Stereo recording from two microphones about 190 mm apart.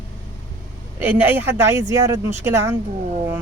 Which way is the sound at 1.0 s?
10° right (ahead or behind).